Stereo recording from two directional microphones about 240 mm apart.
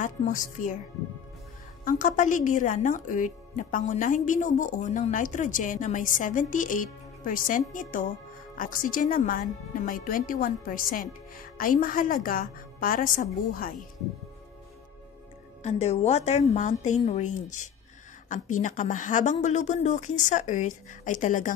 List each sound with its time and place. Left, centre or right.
0.0 s a woman's voice: left
1.9 s a woman's voice: left
15.6 s a woman's voice: left